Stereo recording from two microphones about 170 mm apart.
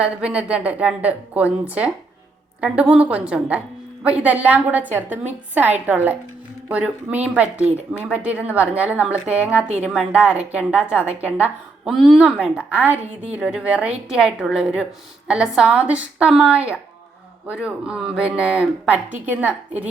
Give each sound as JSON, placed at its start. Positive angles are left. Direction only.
{"t": 0.0, "sound": "a woman's voice", "side_deg": -5}